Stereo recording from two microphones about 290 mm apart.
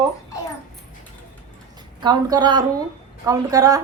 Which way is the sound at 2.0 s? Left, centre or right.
Centre.